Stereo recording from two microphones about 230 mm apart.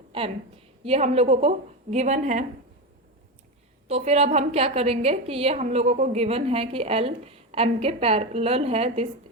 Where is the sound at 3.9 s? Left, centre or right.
Right.